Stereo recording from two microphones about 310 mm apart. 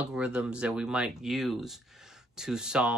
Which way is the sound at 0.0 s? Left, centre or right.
Centre.